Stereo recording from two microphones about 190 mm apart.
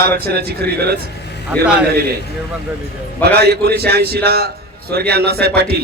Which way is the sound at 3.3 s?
55° right (ahead or behind).